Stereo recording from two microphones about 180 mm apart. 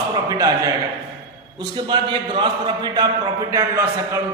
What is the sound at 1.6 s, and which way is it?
A man's voice, 25° right (ahead or behind).